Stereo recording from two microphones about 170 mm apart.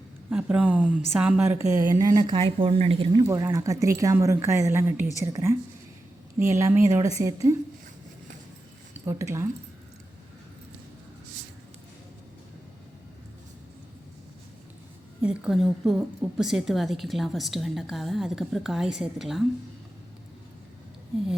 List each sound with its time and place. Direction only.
0.3 s a woman's voice: 5° right (ahead or behind)
1.7 s speech: 20° right (ahead or behind)
8.9 s speech: 15° right (ahead or behind)
15.2 s a woman's voice: 5° right (ahead or behind)